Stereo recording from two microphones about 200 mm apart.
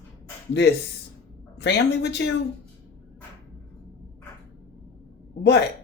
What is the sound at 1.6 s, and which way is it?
Speech, 60° left (ahead or behind).